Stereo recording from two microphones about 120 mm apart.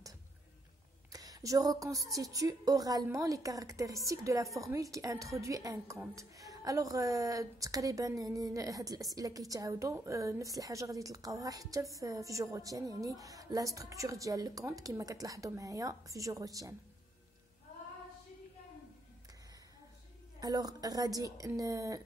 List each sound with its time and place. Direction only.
1.1 s a woman's voice: 30° right (ahead or behind)
20.3 s a woman's voice: 30° right (ahead or behind)